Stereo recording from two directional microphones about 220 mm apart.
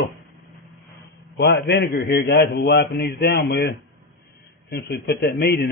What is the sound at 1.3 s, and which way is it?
A man's voice, 45° left (ahead or behind).